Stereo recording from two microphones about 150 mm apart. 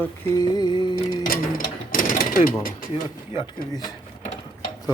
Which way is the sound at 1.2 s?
70° left (ahead or behind).